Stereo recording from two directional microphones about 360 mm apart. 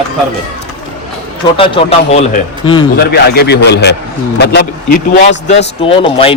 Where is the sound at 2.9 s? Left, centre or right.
Left.